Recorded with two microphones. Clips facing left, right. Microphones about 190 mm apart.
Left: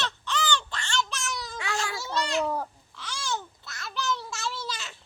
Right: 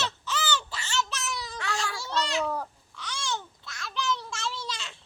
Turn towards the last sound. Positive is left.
turn(degrees=5)  # may be behind; listen again after turning